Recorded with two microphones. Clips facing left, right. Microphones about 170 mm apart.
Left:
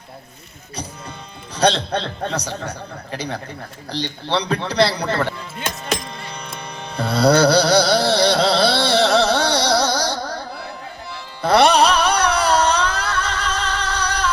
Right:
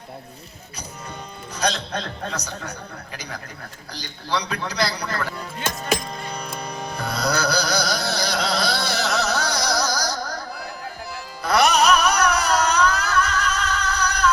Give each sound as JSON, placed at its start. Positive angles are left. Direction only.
{"t": 1.5, "sound": "a man's voice", "side_deg": 30}
{"t": 5.9, "sound": "music", "side_deg": -5}
{"t": 6.9, "sound": "carnatic music", "side_deg": 30}
{"t": 11.4, "sound": "carnatic music", "side_deg": 30}